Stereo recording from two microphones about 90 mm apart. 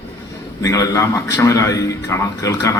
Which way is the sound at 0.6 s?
35° left (ahead or behind).